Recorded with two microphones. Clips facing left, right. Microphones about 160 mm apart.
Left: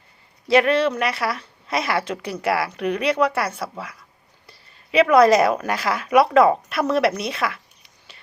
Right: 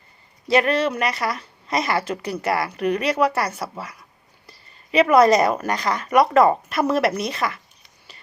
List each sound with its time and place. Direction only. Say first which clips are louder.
0.4 s a woman's voice: left 2 dB; centre (ahead or behind)